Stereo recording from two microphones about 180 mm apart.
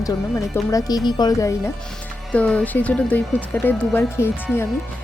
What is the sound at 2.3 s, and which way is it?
A woman's voice, 5° left (ahead or behind).